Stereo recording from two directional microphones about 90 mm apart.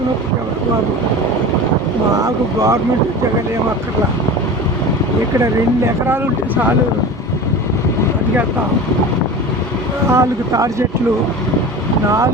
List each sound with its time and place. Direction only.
2.2 s speech: 40° right (ahead or behind)
5.4 s speech: 30° right (ahead or behind)
10.1 s speech: 35° right (ahead or behind)